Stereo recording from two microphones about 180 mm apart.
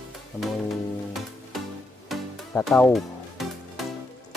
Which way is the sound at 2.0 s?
Centre (ahead or behind).